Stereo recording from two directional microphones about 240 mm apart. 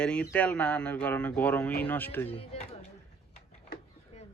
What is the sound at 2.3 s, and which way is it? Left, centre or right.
Speech, left.